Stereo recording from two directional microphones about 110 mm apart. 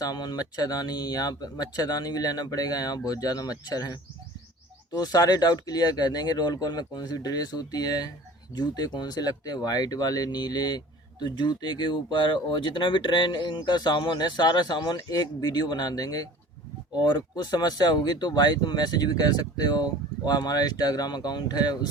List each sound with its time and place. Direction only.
0.0 s speech: 35° left (ahead or behind)